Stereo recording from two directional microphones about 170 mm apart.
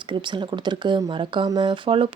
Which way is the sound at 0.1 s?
25° right (ahead or behind).